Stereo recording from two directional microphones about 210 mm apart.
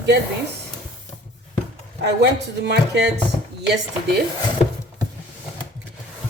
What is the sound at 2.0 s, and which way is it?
Speech, 55° right (ahead or behind).